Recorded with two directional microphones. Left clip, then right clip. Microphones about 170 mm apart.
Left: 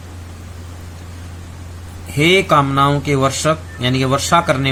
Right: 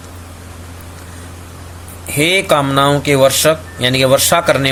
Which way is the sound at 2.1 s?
30° right (ahead or behind).